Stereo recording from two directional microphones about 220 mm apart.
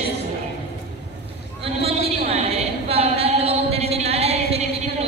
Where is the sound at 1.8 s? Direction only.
25° right (ahead or behind).